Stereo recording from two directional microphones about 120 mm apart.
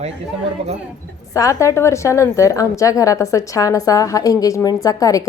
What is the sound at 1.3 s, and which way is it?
A woman's voice, 25° left (ahead or behind).